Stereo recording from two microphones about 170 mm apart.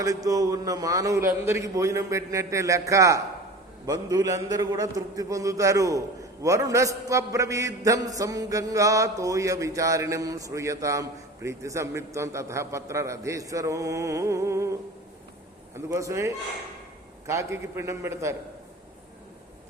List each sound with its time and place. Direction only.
0.0 s a man's voice: 20° right (ahead or behind)
15.9 s a man's voice: 15° right (ahead or behind)